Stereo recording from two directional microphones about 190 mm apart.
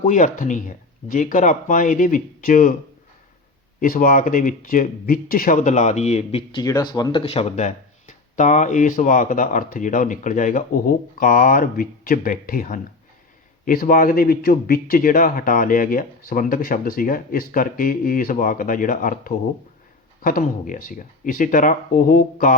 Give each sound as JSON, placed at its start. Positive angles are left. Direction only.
{"t": 0.0, "sound": "speech", "side_deg": 45}
{"t": 3.8, "sound": "speech", "side_deg": 45}
{"t": 6.6, "sound": "speech", "side_deg": 20}